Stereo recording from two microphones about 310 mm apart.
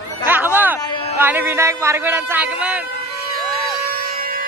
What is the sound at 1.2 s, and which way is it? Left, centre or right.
Speech, centre.